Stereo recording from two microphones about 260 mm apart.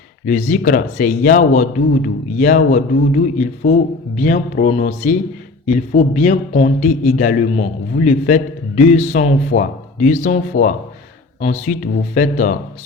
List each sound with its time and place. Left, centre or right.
0.3 s a man's voice: left